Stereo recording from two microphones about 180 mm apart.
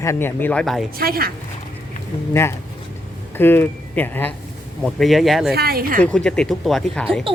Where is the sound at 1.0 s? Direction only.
55° right (ahead or behind).